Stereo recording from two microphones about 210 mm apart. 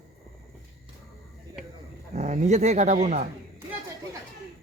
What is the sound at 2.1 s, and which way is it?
Speech, 30° right (ahead or behind).